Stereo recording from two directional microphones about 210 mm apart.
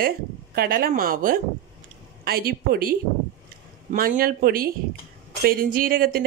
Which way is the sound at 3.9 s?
45° right (ahead or behind).